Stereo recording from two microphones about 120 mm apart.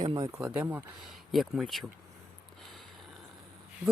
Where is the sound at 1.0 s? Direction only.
Centre (ahead or behind).